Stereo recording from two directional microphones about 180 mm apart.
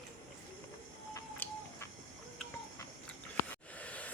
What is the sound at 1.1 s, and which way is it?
Bird, 15° left (ahead or behind).